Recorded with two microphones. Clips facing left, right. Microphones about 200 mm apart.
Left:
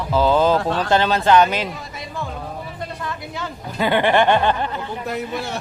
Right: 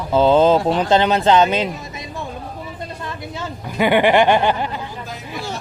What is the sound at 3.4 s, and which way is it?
Speech, 15° right (ahead or behind).